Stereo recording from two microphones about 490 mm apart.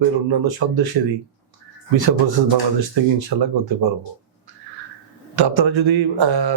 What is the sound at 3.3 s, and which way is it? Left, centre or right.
Speech, right.